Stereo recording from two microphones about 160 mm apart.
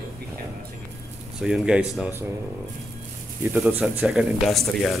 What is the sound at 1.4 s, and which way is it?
Speech, 5° right (ahead or behind).